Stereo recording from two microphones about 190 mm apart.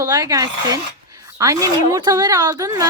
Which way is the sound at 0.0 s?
20° right (ahead or behind).